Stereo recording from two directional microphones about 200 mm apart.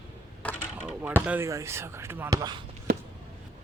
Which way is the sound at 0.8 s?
10° right (ahead or behind).